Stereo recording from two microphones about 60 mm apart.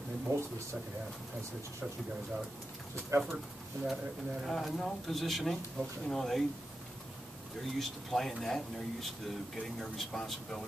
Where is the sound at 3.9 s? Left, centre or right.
Centre.